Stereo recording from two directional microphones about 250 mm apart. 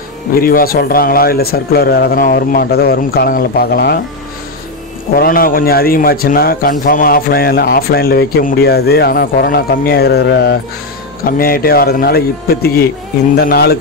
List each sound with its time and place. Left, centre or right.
0.3 s a man's voice: left
5.1 s a man's voice: left